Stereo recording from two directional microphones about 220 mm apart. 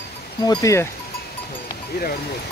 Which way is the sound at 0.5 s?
15° left (ahead or behind).